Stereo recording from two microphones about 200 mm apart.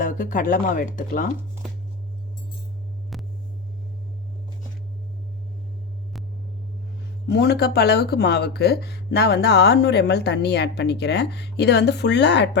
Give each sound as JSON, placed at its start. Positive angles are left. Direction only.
{"t": 0.0, "sound": "speech", "side_deg": 40}
{"t": 3.1, "sound": "vehicle", "side_deg": 0}
{"t": 7.3, "sound": "speech", "side_deg": 55}